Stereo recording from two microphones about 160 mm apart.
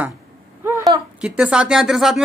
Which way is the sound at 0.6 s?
20° right (ahead or behind).